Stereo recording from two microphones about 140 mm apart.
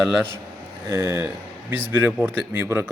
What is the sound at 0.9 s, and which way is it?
A man's voice, 20° right (ahead or behind).